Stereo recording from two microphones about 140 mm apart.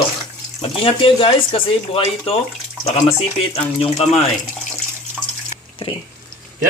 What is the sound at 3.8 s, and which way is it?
Speech, 45° left (ahead or behind).